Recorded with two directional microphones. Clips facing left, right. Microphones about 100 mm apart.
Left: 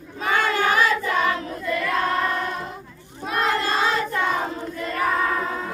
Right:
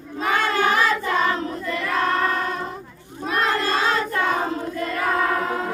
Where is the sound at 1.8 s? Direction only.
40° right (ahead or behind).